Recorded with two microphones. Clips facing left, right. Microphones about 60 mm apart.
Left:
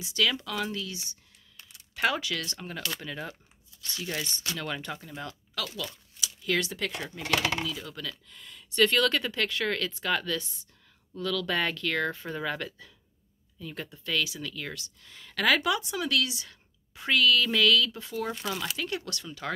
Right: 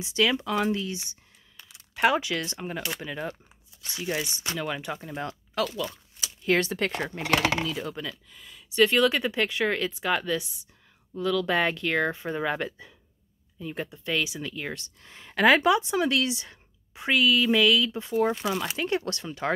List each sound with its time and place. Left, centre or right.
0.0 s speech: right
5.9 s speech: right
7.9 s speech: right
8.3 s speech: centre; by 19.5 s right